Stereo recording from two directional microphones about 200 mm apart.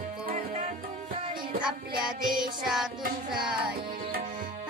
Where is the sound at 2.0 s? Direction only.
5° right (ahead or behind).